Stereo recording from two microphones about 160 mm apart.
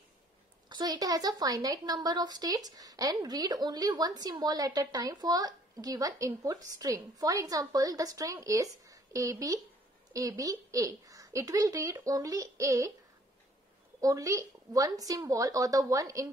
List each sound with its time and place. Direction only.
0.7 s a woman's voice: 25° right (ahead or behind)
14.0 s a woman's voice: 20° right (ahead or behind)